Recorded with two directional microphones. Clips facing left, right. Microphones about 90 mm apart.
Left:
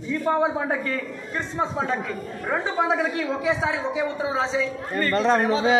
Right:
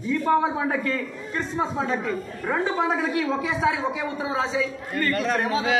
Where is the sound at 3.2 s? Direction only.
25° left (ahead or behind).